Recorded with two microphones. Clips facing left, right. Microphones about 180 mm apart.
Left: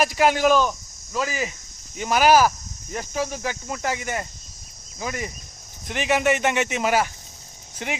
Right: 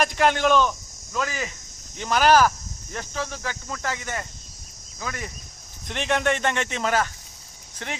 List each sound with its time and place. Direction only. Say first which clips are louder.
0.0 s speech: left 2 dB; 5° left (ahead or behind)